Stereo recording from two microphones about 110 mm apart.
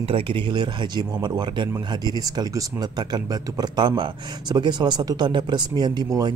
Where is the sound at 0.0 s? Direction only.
55° right (ahead or behind).